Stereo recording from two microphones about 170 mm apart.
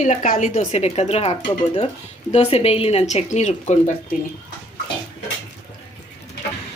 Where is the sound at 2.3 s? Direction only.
35° left (ahead or behind).